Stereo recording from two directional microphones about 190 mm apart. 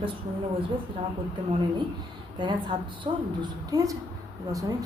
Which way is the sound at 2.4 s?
25° right (ahead or behind).